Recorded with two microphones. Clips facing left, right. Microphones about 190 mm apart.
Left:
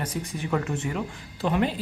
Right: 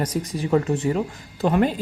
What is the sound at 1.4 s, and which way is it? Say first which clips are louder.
Speech: right 5 dB; 45° right (ahead or behind).